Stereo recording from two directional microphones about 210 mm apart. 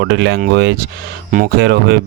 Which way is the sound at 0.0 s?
55° right (ahead or behind).